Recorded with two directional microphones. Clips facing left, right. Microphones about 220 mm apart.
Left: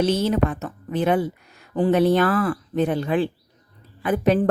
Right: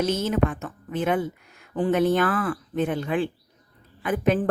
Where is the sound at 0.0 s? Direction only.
35° left (ahead or behind).